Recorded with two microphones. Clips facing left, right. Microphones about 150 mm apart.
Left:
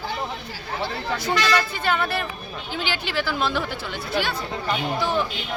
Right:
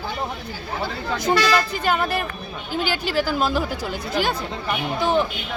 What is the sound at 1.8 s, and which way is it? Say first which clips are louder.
Speech: right 2 dB; 40° right (ahead or behind).